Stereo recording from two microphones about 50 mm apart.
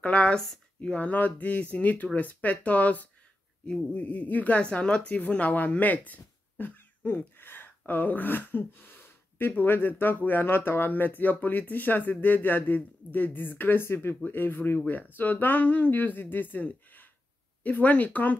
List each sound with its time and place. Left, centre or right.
0.0 s speech: left